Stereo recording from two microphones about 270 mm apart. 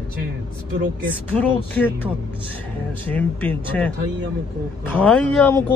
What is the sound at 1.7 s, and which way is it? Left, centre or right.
Speech, centre.